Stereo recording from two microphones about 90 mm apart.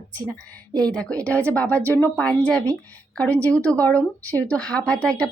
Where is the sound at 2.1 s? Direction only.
10° left (ahead or behind).